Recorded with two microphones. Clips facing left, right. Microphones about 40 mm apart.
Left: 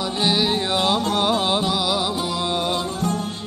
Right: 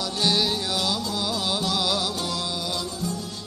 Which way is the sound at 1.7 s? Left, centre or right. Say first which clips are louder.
Left 4 dB; centre.